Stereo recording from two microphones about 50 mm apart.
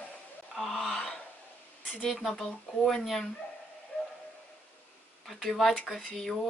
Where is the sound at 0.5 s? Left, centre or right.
Centre.